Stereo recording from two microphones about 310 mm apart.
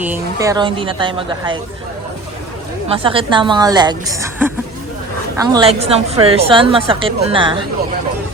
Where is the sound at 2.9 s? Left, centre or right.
Centre.